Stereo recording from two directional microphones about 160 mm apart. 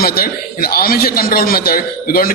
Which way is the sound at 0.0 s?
70° left (ahead or behind).